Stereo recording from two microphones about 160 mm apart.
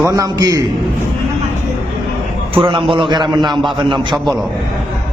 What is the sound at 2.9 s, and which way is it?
Speech, 30° right (ahead or behind).